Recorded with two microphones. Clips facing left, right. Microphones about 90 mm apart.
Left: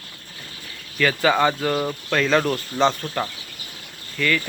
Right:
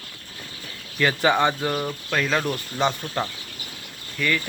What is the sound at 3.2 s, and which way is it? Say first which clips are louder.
Speech: left 1 dB; 25° right (ahead or behind).